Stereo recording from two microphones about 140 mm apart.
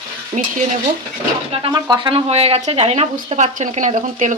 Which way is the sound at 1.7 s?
35° right (ahead or behind).